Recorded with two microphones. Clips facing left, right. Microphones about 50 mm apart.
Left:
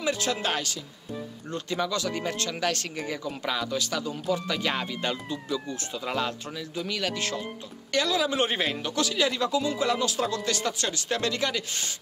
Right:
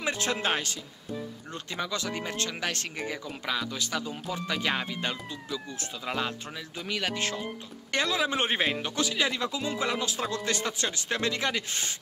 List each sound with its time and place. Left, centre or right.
0.0 s speech: right
1.5 s speech: centre
3.3 s speech: centre; by 11.9 s right